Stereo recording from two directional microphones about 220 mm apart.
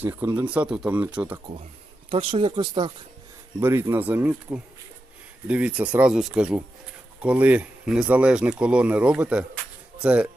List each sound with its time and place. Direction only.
0.0 s speech: 10° right (ahead or behind)
2.0 s speech: 25° right (ahead or behind)
3.6 s speech: 10° right (ahead or behind)